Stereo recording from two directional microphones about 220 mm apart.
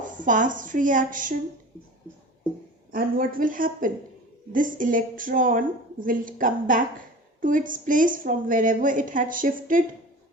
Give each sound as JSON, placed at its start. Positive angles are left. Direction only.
{"t": 0.0, "sound": "a woman's voice", "side_deg": -35}
{"t": 2.9, "sound": "a woman's voice", "side_deg": -40}